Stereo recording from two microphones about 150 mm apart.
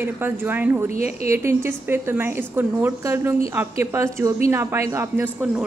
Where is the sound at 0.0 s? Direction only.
15° right (ahead or behind).